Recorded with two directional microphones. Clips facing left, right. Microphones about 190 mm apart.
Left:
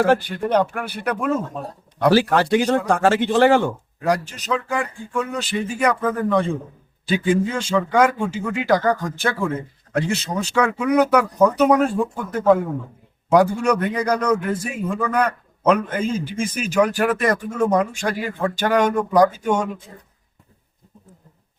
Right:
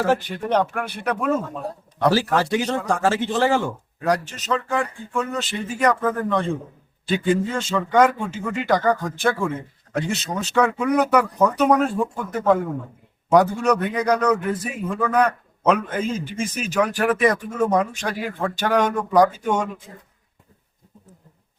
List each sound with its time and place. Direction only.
0.3 s a man's voice: 5° left (ahead or behind)
2.1 s speech: 65° left (ahead or behind)
4.0 s a man's voice: 5° left (ahead or behind)